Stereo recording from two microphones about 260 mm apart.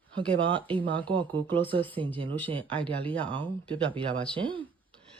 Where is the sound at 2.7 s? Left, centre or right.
Centre.